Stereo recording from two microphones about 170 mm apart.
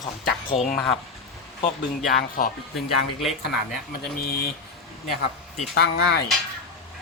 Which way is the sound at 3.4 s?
70° left (ahead or behind).